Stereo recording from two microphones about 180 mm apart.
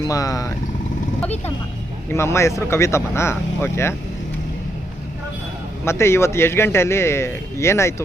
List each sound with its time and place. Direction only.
0.0 s speech: 20° left (ahead or behind)
2.0 s a man's voice: 15° left (ahead or behind)
5.8 s a man's voice: 15° left (ahead or behind)